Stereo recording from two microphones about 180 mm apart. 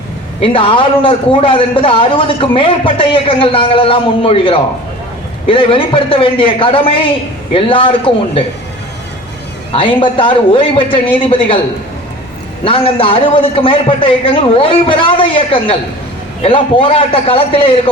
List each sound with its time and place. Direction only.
0.4 s a man's voice: 30° left (ahead or behind)
9.7 s a man's voice: 30° left (ahead or behind)
12.6 s a man's voice: 30° left (ahead or behind)